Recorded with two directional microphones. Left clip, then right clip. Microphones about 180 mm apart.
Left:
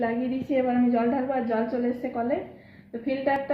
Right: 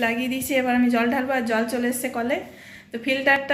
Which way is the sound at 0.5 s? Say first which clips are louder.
Right 3 dB; 10° right (ahead or behind).